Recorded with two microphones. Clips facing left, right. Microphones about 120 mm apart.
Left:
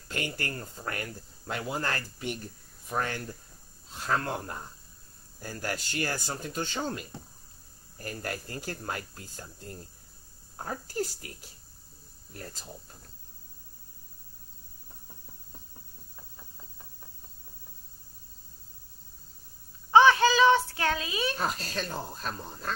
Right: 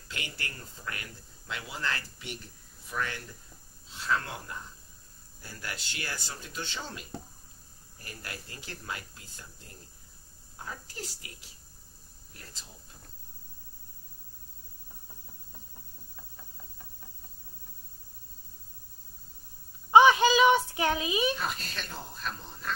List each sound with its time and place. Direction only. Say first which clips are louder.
0.1 s speech: left 7 dB; 45° left (ahead or behind)
19.9 s a sound: even; 15° right (ahead or behind)
21.4 s speech: left 4 dB; 40° left (ahead or behind)